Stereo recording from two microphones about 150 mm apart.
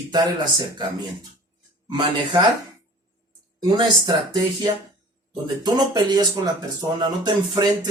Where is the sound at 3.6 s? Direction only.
30° right (ahead or behind).